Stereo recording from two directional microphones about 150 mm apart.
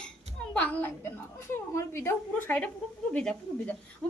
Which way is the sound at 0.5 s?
10° left (ahead or behind).